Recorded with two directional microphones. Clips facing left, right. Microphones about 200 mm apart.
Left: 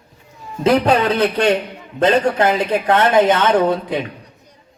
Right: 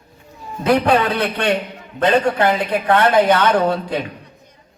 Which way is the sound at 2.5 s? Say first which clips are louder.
Left 1 dB; 20° left (ahead or behind).